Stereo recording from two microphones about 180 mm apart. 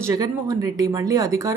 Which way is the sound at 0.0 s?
20° right (ahead or behind).